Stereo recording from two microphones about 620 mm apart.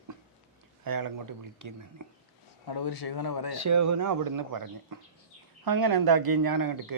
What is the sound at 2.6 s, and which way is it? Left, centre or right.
Speech, left.